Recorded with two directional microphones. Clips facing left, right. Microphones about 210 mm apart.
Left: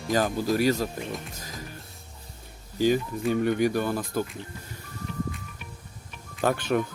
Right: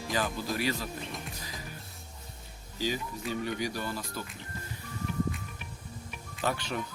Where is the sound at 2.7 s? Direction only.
50° left (ahead or behind).